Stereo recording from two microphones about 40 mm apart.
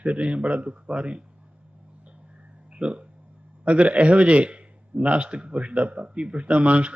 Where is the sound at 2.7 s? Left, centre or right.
Right.